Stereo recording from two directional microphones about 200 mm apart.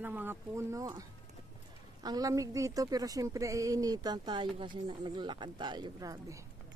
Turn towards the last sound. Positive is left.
turn(degrees=-15)  # may be behind; listen again after turning